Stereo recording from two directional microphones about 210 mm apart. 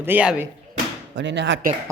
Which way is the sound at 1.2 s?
60° right (ahead or behind).